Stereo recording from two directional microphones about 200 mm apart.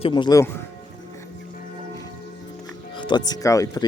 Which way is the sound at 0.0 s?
25° left (ahead or behind).